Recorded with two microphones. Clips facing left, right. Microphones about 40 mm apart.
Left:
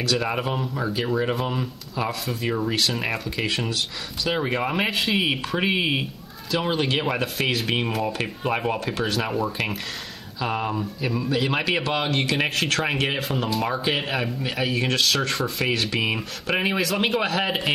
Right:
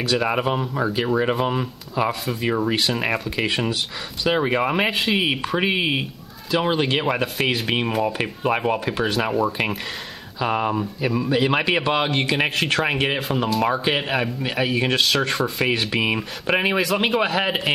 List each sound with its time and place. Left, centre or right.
0.0 s a man's voice: centre
10.4 s a man's voice: centre